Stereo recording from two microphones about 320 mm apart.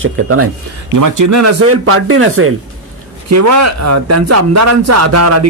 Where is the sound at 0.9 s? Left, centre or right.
Right.